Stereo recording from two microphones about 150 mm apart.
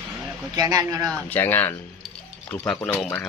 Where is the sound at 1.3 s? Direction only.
15° left (ahead or behind).